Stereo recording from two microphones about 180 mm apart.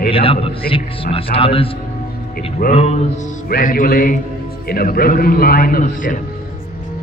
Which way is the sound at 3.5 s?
55° left (ahead or behind).